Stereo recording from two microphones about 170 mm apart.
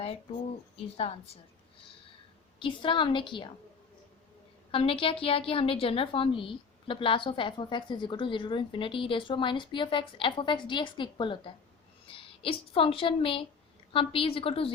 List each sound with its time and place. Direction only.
0.9 s a woman's voice: 35° left (ahead or behind)
2.6 s a woman's voice: 30° left (ahead or behind)
4.7 s a woman's voice: 30° left (ahead or behind)